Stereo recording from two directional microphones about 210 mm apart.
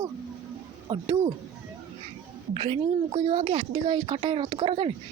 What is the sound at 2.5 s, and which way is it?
A woman's voice, 25° right (ahead or behind).